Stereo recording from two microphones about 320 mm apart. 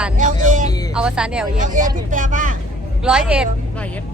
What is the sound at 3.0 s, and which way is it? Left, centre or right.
A woman's voice, centre.